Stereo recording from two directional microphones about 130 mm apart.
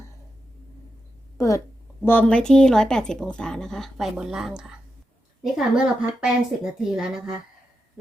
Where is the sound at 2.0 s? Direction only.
10° left (ahead or behind); by 7.3 s 5° right (ahead or behind).